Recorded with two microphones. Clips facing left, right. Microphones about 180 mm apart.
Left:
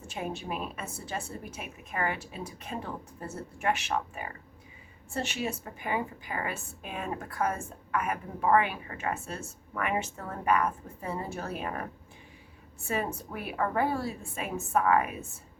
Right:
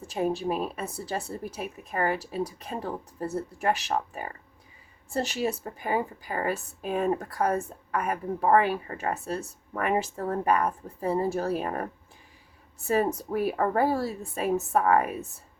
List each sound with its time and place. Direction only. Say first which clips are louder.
0.1 s a woman's voice: right 8 dB; 35° right (ahead or behind)
12.9 s a woman's voice: right 7 dB; 40° right (ahead or behind)